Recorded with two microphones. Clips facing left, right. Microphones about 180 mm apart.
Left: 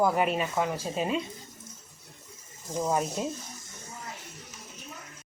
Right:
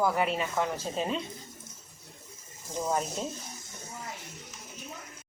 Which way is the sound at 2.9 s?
5° left (ahead or behind).